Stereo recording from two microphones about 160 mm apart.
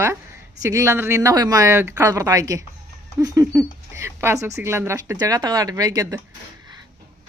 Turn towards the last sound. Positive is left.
turn(degrees=-20)  # may be behind; listen again after turning